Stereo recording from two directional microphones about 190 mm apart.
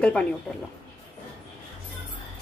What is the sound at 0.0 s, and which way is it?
Speech, 5° left (ahead or behind).